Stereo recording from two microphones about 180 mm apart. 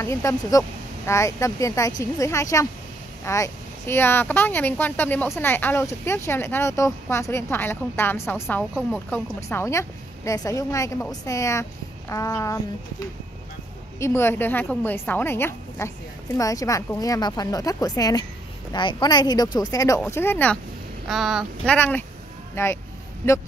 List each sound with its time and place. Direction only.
0.0 s speech: 15° left (ahead or behind)
13.9 s speech: 15° left (ahead or behind)
21.1 s speech: centre (ahead or behind)
21.7 s speech: 10° left (ahead or behind)